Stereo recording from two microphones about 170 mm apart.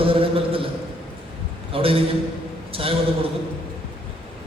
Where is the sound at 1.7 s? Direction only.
35° right (ahead or behind).